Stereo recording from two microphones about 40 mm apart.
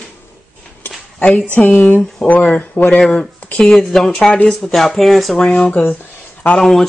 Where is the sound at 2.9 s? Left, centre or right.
Centre.